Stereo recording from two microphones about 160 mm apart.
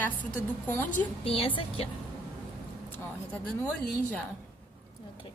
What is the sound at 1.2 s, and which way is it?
Speech, 35° left (ahead or behind).